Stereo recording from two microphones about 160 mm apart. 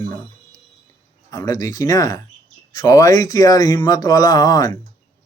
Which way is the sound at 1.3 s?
20° left (ahead or behind).